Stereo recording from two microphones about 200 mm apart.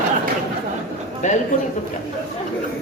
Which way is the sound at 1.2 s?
35° left (ahead or behind).